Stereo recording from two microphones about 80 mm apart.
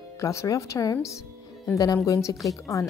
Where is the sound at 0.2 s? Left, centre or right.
Left.